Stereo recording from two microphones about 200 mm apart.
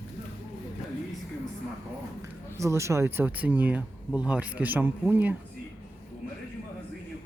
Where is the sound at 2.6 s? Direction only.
15° right (ahead or behind).